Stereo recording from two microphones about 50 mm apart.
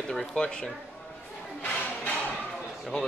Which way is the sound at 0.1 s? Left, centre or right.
Centre.